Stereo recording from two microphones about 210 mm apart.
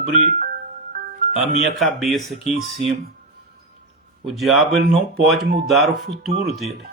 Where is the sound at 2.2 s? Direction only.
Centre (ahead or behind).